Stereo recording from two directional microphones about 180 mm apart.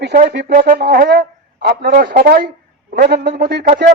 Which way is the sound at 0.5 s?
55° right (ahead or behind).